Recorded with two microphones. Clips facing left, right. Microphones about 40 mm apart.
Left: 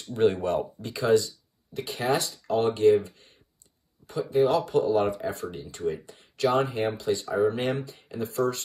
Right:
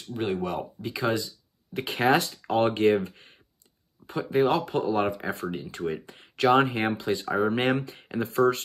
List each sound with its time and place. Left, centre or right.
0.1 s speech: centre
0.4 s speech: centre
0.9 s speech: right
1.7 s speech: right